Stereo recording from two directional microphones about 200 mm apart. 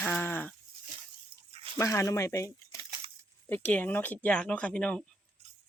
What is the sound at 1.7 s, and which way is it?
Speech, 15° left (ahead or behind).